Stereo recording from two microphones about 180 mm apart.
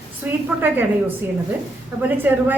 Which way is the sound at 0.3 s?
10° right (ahead or behind).